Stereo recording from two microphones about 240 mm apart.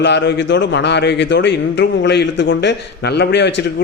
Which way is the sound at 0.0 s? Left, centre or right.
Left.